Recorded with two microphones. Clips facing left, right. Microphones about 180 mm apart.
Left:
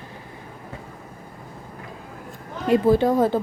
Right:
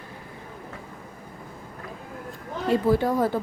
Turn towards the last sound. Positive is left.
turn(degrees=25)  # may be behind; listen again after turning